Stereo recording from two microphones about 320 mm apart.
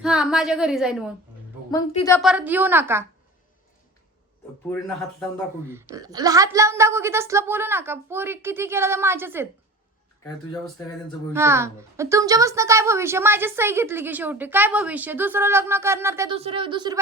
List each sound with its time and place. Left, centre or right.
0.0 s a woman's voice: centre
1.9 s a woman's voice: centre
2.1 s a woman's voice: centre
5.2 s a woman's voice: centre
11.3 s a woman's voice: centre